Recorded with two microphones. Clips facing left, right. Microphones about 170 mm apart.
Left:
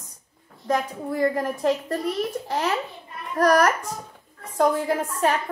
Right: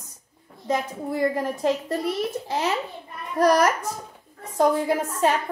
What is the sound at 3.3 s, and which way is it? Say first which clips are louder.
A woman's voice: even; 10° right (ahead or behind).